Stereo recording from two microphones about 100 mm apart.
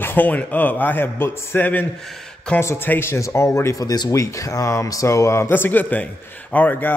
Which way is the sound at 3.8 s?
40° left (ahead or behind).